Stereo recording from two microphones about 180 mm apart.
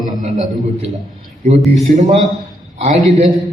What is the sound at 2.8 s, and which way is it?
Speech, 35° right (ahead or behind).